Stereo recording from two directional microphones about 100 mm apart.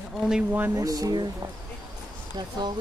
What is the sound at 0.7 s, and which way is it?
Speech, 35° right (ahead or behind).